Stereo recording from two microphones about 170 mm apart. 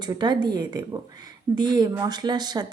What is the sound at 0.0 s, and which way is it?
A woman's voice, 25° right (ahead or behind).